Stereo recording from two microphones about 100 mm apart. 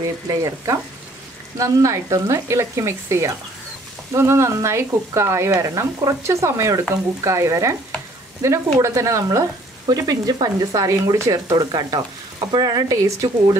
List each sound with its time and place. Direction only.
0.0 s speech: 35° right (ahead or behind)